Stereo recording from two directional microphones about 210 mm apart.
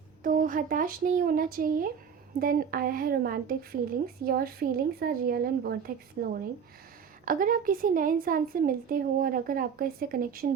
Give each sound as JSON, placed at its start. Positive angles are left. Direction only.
{"t": 0.2, "sound": "a woman's voice", "side_deg": -40}
{"t": 7.3, "sound": "a woman's voice", "side_deg": -40}